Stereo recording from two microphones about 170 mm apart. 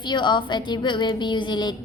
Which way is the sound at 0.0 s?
25° left (ahead or behind).